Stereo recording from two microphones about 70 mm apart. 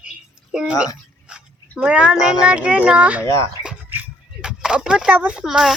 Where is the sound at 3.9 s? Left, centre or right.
Right.